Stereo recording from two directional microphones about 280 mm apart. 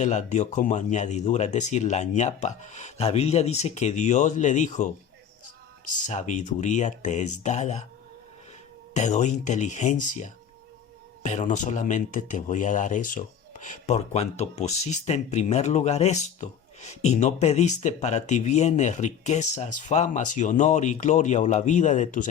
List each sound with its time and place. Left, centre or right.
0.0 s speech: left
6.1 s speech: left
8.9 s speech: left